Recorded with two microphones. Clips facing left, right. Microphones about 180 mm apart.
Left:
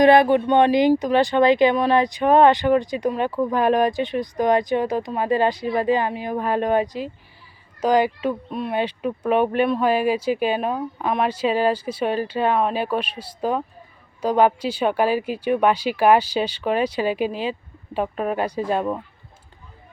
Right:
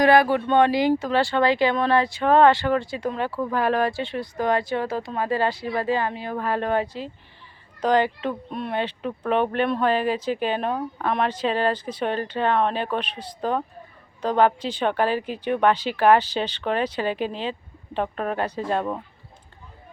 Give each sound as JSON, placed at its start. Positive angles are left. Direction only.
{"t": 0.0, "sound": "speech", "side_deg": 20}
{"t": 8.8, "sound": "speech", "side_deg": 10}